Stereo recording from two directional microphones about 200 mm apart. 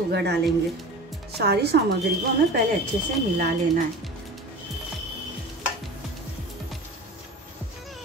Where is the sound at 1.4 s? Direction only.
55° right (ahead or behind).